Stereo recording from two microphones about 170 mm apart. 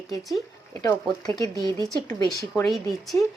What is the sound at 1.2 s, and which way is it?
Speech, 20° left (ahead or behind).